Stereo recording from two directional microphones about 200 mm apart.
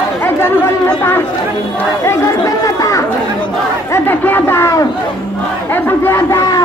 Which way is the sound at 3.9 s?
10° left (ahead or behind).